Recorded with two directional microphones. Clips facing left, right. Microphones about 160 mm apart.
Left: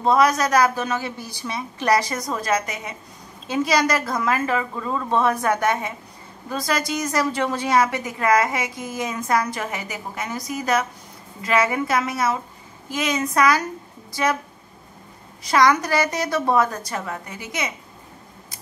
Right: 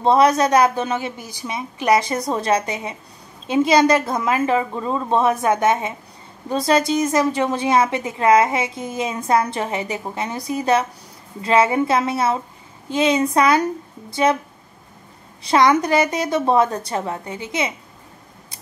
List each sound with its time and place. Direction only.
0.0 s a woman's voice: 30° right (ahead or behind)
15.4 s a woman's voice: 25° right (ahead or behind)